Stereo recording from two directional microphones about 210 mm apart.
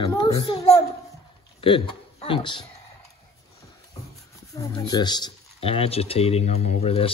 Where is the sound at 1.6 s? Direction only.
25° left (ahead or behind).